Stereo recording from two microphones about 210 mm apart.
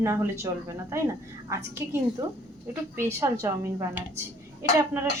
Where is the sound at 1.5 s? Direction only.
10° right (ahead or behind).